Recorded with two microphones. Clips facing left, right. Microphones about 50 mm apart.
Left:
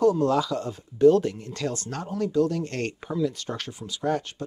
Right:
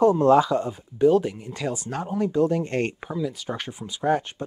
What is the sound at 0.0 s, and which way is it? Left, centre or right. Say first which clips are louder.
Speech: right 4 dB; right.